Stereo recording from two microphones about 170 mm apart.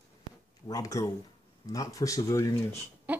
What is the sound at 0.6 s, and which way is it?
Speech, 20° left (ahead or behind).